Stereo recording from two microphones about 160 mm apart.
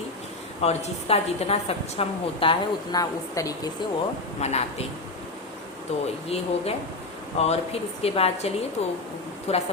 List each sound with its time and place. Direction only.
0.6 s a woman's voice: 40° left (ahead or behind); by 3.7 s 20° left (ahead or behind)
4.4 s speech: 45° left (ahead or behind)
6.2 s a woman's voice: 40° left (ahead or behind)